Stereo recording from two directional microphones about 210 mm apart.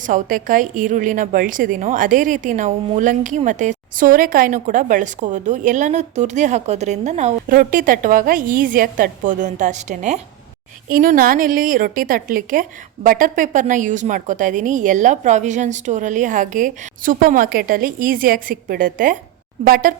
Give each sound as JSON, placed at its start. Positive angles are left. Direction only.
{"t": 0.0, "sound": "a woman's voice", "side_deg": -40}